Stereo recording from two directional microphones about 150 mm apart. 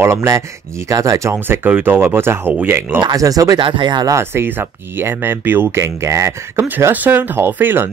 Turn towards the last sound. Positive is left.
turn(degrees=-15)  # may be behind; listen again after turning